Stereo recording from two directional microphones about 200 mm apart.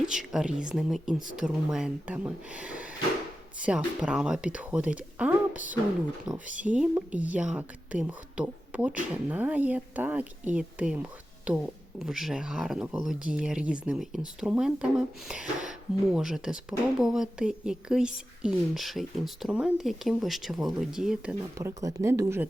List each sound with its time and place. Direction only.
0.0 s speech: centre (ahead or behind)
21.6 s speech: 15° right (ahead or behind)